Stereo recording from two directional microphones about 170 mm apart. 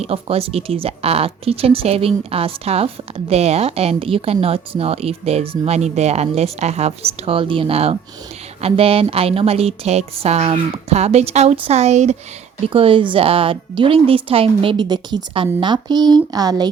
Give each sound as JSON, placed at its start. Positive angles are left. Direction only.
{"t": 0.0, "sound": "speech", "side_deg": -35}